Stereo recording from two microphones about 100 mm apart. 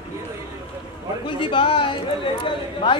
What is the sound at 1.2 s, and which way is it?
A man's voice, 55° left (ahead or behind).